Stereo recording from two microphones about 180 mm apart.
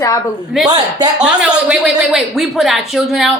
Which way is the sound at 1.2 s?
5° right (ahead or behind).